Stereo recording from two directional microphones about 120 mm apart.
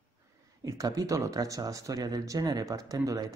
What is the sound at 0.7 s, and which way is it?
A man's voice, 30° right (ahead or behind).